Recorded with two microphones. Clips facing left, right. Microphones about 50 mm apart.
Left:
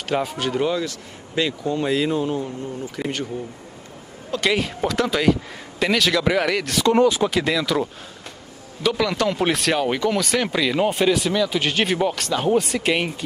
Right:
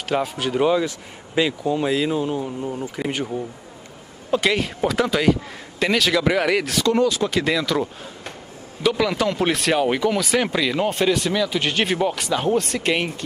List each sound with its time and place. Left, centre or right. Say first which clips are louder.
0.1 s speech: even; centre
3.0 s speech: right 1 dB; centre
4.4 s speech: left 1 dB; centre
6.9 s speech: left 3 dB; left
7.2 s speech: even; centre